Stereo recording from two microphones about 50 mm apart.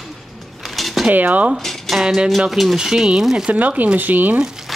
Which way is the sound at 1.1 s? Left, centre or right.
Right.